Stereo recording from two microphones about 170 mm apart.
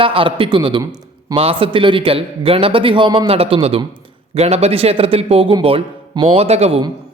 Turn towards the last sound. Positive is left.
turn(degrees=-35)  # may be behind; listen again after turning